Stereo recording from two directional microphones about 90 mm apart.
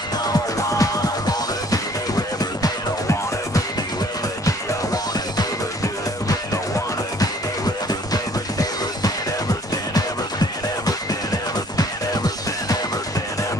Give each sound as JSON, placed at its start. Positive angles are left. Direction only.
{"t": 0.3, "sound": "music", "side_deg": 40}
{"t": 7.2, "sound": "music", "side_deg": 45}
{"t": 11.7, "sound": "music", "side_deg": 45}